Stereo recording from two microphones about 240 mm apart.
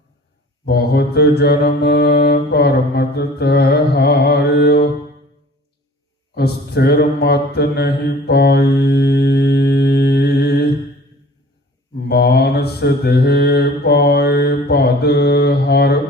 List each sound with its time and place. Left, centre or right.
0.6 s mantra: left
6.3 s mantra: left
11.9 s mantra: left